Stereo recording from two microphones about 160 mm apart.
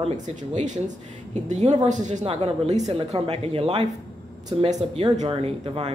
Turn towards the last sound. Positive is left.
turn(degrees=-35)  # may be behind; listen again after turning